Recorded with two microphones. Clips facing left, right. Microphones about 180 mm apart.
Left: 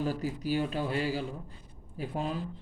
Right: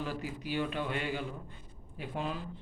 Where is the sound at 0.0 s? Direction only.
40° left (ahead or behind).